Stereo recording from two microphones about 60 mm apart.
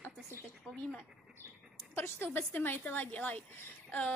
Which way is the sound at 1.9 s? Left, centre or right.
Left.